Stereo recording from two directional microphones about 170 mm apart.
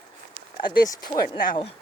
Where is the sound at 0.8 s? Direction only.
20° left (ahead or behind).